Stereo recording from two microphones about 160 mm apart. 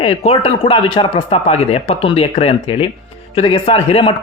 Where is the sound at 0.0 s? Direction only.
40° left (ahead or behind).